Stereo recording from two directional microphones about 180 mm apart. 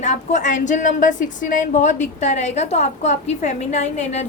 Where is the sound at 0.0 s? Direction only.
40° left (ahead or behind).